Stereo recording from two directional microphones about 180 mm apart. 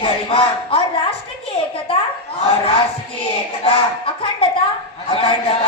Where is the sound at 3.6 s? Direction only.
30° left (ahead or behind).